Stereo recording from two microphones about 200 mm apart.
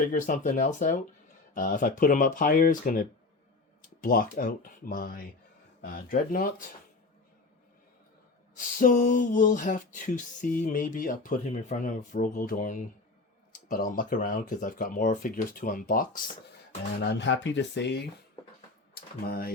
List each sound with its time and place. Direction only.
0.1 s speech: 40° left (ahead or behind)
8.5 s speech: 40° left (ahead or behind)
17.0 s speech: 60° left (ahead or behind)